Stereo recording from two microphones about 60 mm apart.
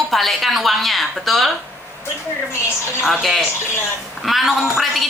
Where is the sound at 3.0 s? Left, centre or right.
Centre.